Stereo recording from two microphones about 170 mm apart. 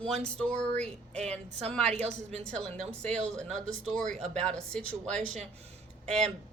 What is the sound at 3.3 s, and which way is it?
Speech, 45° right (ahead or behind).